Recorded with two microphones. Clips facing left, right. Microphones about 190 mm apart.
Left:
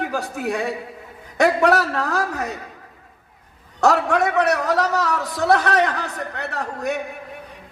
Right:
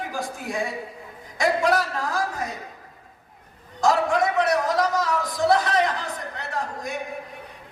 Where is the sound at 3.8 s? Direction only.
65° left (ahead or behind).